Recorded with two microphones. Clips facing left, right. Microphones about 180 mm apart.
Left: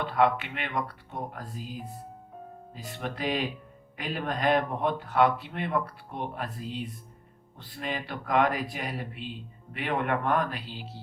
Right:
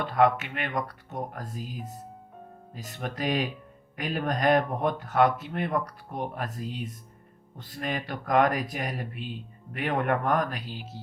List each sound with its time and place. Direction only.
0.0 s speech: 45° right (ahead or behind)